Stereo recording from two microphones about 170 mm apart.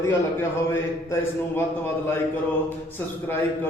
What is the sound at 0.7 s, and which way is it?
A man's voice, 15° left (ahead or behind).